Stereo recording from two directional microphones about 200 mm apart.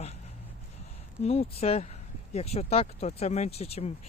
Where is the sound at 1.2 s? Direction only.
30° left (ahead or behind).